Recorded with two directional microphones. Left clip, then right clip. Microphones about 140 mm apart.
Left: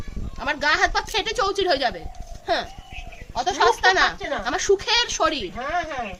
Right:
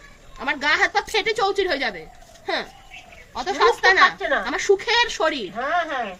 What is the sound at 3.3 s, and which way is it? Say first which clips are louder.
Speech: even; 40° left (ahead or behind).